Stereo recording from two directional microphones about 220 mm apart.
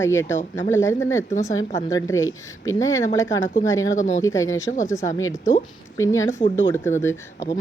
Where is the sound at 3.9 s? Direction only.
35° left (ahead or behind).